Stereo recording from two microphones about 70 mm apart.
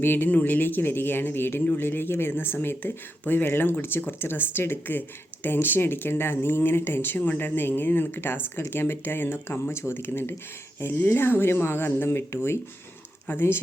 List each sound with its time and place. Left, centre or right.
0.0 s speech: left